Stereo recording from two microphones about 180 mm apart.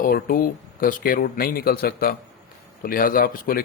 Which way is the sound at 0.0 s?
50° left (ahead or behind).